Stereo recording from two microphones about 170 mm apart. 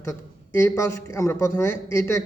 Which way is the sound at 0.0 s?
15° left (ahead or behind).